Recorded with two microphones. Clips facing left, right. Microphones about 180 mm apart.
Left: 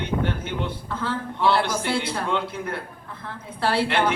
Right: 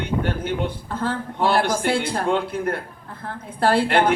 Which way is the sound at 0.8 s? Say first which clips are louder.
Right 2 dB; 50° right (ahead or behind).